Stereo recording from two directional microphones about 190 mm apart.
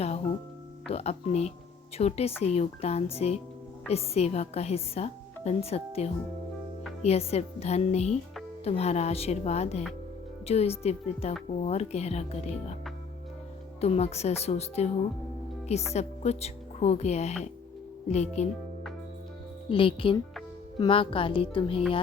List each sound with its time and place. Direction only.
0.9 s speech: 35° left (ahead or behind)
13.8 s speech: 35° left (ahead or behind)
15.9 s speech: 35° left (ahead or behind)
19.6 s speech: 30° left (ahead or behind)